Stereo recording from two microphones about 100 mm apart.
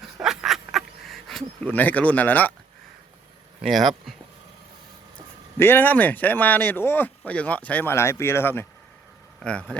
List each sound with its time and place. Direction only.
0.2 s dog: 5° right (ahead or behind)
1.6 s speech: 15° left (ahead or behind)
3.6 s speech: centre (ahead or behind)
5.5 s speech: 20° left (ahead or behind)
9.4 s speech: 10° left (ahead or behind)